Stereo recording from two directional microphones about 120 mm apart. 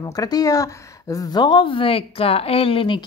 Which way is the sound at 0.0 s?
30° left (ahead or behind).